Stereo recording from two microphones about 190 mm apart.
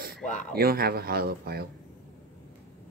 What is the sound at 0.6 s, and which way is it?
Speech, 50° right (ahead or behind).